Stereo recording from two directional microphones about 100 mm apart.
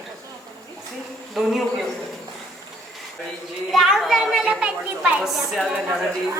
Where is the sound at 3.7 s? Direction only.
5° right (ahead or behind).